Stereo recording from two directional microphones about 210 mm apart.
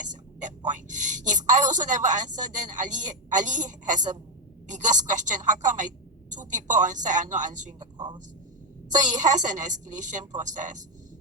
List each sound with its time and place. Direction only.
0.1 s a sound: 35° right (ahead or behind)
4.8 s a woman's voice: 35° right (ahead or behind)
7.8 s speech: 20° right (ahead or behind)
9.0 s a woman's voice: 35° right (ahead or behind)